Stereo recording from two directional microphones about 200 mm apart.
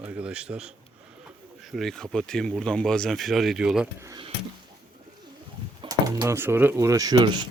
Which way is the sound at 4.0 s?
15° right (ahead or behind).